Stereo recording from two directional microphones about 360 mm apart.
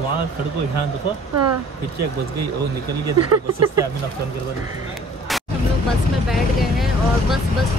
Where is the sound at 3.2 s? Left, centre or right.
Right.